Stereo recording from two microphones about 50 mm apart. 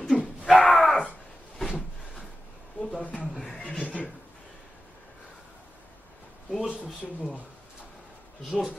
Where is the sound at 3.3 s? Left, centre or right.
Centre.